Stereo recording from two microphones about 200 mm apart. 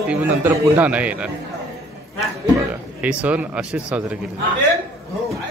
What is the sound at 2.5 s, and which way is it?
A man's voice, 5° right (ahead or behind).